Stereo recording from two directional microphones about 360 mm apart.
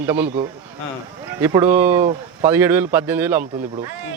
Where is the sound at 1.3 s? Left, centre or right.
Centre.